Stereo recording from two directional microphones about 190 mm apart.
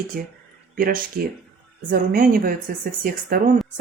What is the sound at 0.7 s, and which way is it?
Speech, 50° right (ahead or behind).